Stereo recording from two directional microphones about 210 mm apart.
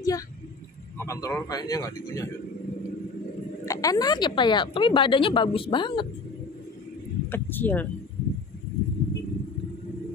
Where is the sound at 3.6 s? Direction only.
15° left (ahead or behind).